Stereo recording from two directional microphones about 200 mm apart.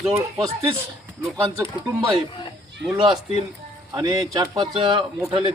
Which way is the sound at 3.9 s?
20° right (ahead or behind).